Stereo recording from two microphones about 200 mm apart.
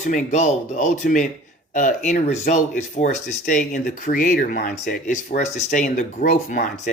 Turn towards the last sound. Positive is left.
turn(degrees=40)  # may be behind; listen again after turning